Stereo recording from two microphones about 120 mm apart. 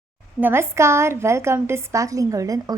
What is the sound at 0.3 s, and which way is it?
A woman's voice, 20° right (ahead or behind).